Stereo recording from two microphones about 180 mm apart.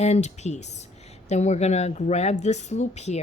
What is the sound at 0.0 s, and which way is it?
Speech, 40° left (ahead or behind).